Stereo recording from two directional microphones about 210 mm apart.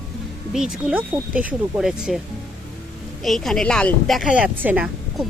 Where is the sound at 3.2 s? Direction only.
Centre (ahead or behind).